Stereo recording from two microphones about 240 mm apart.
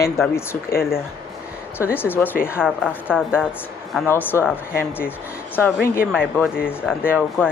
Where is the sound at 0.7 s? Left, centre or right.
Left.